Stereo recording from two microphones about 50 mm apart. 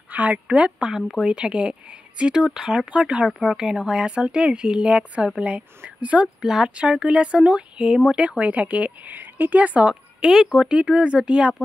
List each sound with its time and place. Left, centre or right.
0.1 s speech: right
6.4 s speech: centre; by 9.9 s right
10.2 s speech: centre